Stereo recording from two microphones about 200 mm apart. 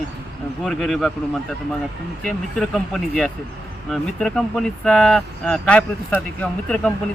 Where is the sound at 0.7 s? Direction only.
Centre (ahead or behind).